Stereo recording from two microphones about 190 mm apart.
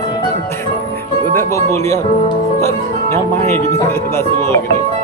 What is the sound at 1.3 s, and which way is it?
Speech, 15° left (ahead or behind).